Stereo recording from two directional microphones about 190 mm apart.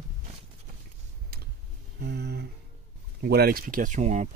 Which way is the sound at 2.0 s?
60° right (ahead or behind).